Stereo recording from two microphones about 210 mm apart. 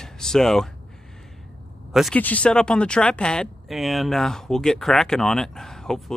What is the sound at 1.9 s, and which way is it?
Speech, 5° left (ahead or behind).